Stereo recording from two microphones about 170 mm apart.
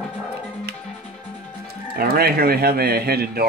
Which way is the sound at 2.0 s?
65° right (ahead or behind).